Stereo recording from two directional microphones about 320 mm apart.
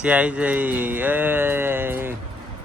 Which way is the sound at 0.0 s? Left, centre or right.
Centre.